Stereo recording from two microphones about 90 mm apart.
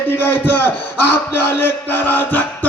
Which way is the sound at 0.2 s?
25° left (ahead or behind).